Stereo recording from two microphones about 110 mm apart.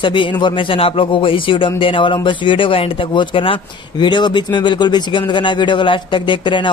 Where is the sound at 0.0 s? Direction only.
50° left (ahead or behind).